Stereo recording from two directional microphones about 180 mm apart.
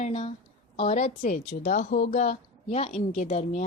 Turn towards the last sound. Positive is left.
turn(degrees=40)  # may be behind; listen again after turning